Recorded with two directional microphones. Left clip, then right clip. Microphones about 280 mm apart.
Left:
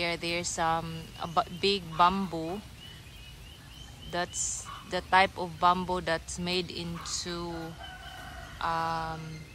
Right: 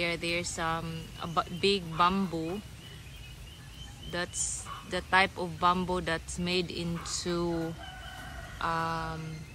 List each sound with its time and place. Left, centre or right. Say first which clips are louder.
0.0 s a man's voice: even; centre
4.1 s speech: left 2 dB; centre
4.5 s a sound: left 1 dB; left
4.9 s a man's voice: left 2 dB; centre